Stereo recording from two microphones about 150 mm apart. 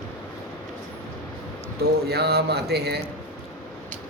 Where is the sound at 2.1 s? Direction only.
90° right.